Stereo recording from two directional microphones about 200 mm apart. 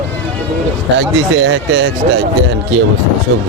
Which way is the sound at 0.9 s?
65° right (ahead or behind).